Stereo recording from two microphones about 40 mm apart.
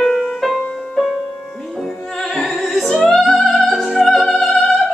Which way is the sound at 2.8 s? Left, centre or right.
Centre.